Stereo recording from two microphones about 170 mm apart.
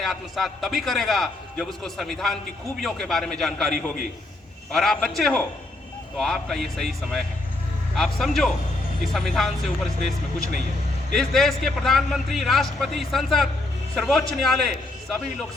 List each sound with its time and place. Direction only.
0.0 s a man's voice: centre (ahead or behind)
11.1 s a man's voice: centre (ahead or behind)